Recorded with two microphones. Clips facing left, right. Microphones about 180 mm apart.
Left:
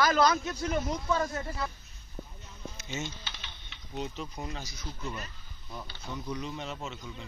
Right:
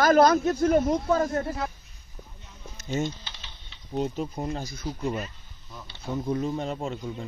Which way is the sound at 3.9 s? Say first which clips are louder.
Right 8 dB; 45° right (ahead or behind).